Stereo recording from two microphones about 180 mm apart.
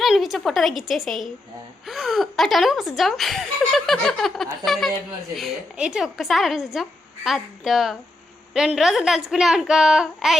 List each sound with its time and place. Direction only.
0.0 s speech: centre (ahead or behind)